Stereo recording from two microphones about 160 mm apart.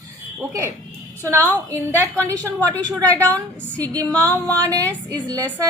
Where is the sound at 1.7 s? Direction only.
15° right (ahead or behind).